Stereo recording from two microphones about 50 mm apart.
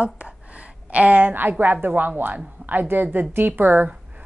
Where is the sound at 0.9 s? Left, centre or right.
Right.